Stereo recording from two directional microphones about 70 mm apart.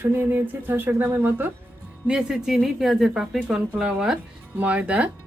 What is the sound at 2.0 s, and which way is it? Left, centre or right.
Speech, centre.